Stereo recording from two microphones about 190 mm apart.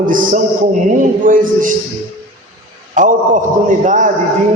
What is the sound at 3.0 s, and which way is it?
A man's voice, 45° right (ahead or behind).